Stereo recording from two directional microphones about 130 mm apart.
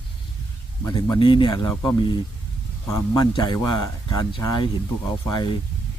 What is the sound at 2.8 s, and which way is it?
Speech, 30° left (ahead or behind).